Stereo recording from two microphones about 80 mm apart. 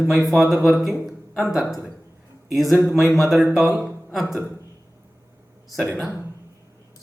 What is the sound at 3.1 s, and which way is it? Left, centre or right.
Speech, centre.